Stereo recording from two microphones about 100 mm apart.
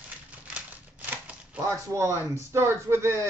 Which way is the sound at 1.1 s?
15° right (ahead or behind).